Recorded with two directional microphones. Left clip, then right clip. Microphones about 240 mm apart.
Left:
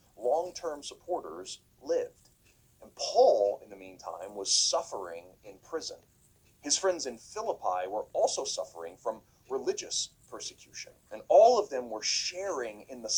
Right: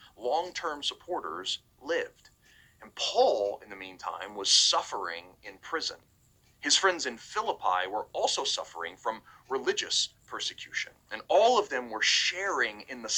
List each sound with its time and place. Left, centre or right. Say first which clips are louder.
0.2 s speech: even; right